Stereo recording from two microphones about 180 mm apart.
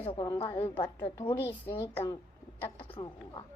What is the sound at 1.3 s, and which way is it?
Speech, 15° left (ahead or behind).